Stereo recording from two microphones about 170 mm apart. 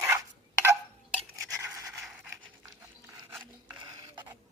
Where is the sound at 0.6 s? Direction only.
15° right (ahead or behind).